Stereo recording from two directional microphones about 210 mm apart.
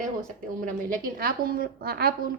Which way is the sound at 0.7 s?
40° right (ahead or behind).